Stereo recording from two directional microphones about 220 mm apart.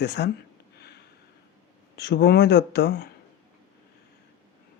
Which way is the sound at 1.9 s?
50° left (ahead or behind).